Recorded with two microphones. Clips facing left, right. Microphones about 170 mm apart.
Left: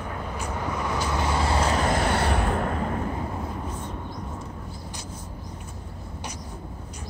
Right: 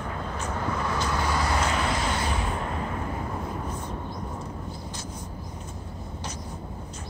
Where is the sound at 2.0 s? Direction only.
65° left (ahead or behind).